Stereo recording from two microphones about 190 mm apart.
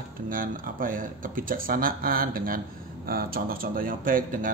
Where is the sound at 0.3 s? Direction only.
45° right (ahead or behind).